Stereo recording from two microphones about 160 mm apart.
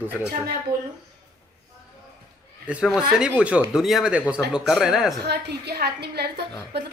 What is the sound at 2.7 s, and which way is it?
Speech, 5° right (ahead or behind).